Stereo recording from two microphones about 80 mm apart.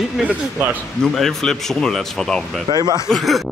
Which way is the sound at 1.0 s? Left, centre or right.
Centre.